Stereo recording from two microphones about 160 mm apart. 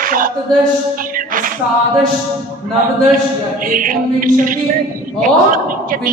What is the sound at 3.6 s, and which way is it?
A woman's voice, 60° right (ahead or behind).